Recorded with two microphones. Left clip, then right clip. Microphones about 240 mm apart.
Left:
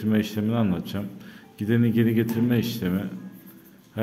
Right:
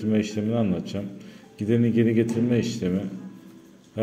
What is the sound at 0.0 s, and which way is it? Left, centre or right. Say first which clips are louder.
Speech: even; centre.